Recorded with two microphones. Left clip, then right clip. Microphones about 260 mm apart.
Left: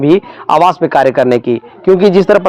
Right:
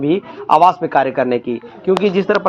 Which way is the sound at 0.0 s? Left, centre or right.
Left.